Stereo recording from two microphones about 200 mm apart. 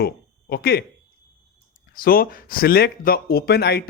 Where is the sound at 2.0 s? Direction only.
45° left (ahead or behind).